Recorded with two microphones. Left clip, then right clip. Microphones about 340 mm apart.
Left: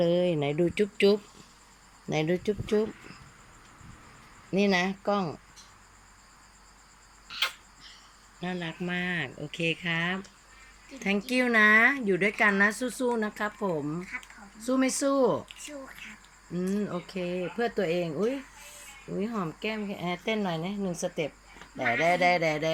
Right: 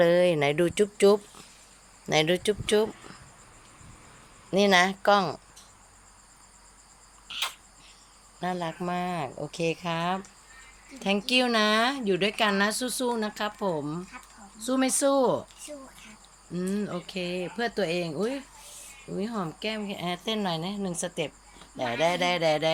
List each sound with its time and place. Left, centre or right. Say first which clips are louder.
0.0 s speech: right 5 dB; right
0.6 s speech: right 1 dB; right
2.3 s speech: right 3 dB; right
4.5 s speech: right 5 dB; right
7.3 s cricket: left 2 dB; centre
8.4 s speech: right 5 dB; right
8.9 s speech: left 1 dB; centre
9.4 s speech: right 1 dB; right
9.8 s speech: right 1 dB; centre
16.6 s speech: even; centre